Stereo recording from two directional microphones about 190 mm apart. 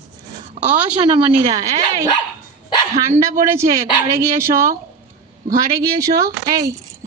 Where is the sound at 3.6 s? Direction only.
15° right (ahead or behind).